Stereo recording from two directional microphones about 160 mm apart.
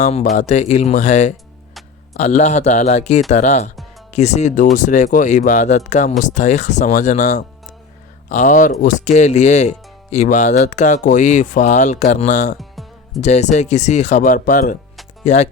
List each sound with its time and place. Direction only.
0.0 s speech: 45° left (ahead or behind)
12.5 s music: centre (ahead or behind)
13.2 s speech: 45° left (ahead or behind)